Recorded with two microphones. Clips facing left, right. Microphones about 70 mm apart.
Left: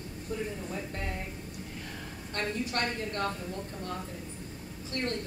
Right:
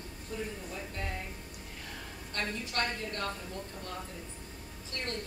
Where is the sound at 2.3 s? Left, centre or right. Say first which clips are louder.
Left 2 dB; left.